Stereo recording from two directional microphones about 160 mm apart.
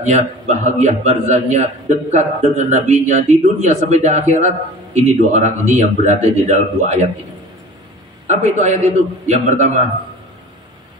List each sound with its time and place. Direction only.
0.0 s a man's voice: 45° right (ahead or behind)
8.3 s a man's voice: 45° right (ahead or behind)